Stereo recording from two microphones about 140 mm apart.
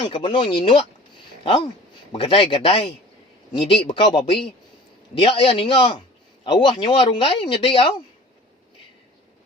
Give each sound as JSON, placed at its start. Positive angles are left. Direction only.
{"t": 0.0, "sound": "speech", "side_deg": 35}